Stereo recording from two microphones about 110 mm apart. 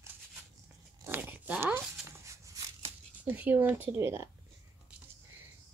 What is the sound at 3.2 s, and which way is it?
A woman's voice, 15° right (ahead or behind).